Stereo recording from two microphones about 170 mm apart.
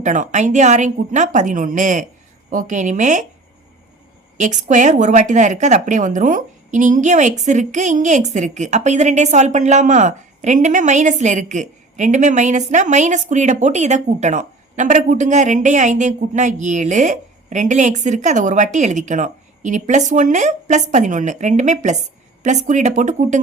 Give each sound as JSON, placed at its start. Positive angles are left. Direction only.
{"t": 0.0, "sound": "speech", "side_deg": -45}
{"t": 4.4, "sound": "speech", "side_deg": -45}